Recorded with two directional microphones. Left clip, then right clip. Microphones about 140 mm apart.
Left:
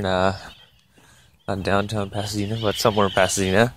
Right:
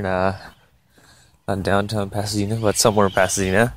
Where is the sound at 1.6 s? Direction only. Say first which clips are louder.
Right 1 dB; 15° right (ahead or behind).